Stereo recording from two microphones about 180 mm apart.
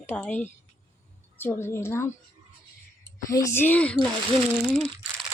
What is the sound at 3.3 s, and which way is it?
Speech, 15° left (ahead or behind).